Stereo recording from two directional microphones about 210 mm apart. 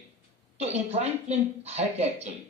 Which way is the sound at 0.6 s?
30° right (ahead or behind).